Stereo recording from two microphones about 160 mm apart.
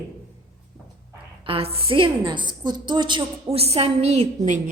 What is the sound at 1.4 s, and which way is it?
A woman's voice, 35° right (ahead or behind).